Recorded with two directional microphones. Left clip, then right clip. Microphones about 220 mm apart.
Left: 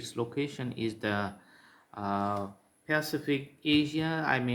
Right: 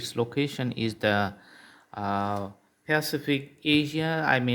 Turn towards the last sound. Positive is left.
turn(degrees=-35)  # may be behind; listen again after turning